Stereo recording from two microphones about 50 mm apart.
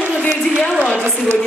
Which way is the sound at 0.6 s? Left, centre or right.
Centre.